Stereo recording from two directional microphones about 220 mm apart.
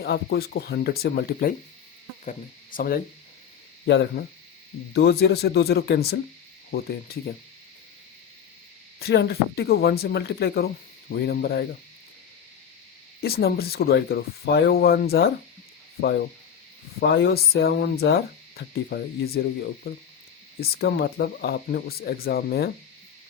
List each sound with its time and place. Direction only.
0.0 s speech: 45° left (ahead or behind)
2.7 s speech: 40° left (ahead or behind)
4.2 s speech: 45° left (ahead or behind)
9.0 s speech: 45° left (ahead or behind)
13.2 s speech: 45° left (ahead or behind)
17.2 s speech: 45° left (ahead or behind)